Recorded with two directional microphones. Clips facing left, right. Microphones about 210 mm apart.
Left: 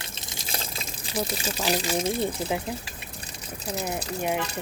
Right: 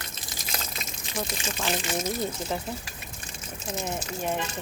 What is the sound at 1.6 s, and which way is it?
Speech, 35° left (ahead or behind).